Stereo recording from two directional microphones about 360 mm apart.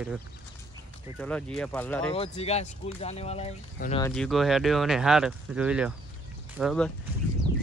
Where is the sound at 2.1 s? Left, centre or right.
Centre.